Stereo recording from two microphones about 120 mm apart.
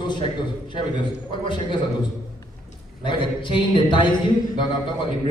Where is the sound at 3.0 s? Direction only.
45° left (ahead or behind).